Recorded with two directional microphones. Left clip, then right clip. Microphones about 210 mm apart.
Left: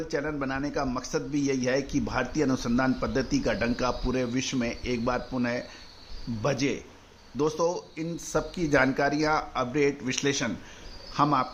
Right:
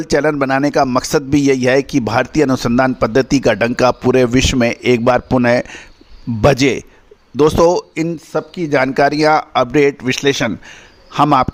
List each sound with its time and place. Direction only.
0.0 s a man's voice: 55° right (ahead or behind)
8.1 s a man's voice: 40° right (ahead or behind); by 11.4 s 55° right (ahead or behind)